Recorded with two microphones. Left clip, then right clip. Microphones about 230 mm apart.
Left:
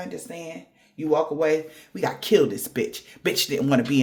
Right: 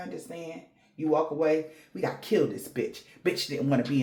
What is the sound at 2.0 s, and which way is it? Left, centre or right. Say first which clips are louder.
Speech: left 6 dB; left.